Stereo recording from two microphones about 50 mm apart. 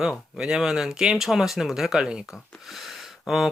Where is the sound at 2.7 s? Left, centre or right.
Centre.